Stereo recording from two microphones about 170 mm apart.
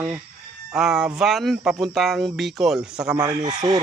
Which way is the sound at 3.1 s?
25° right (ahead or behind).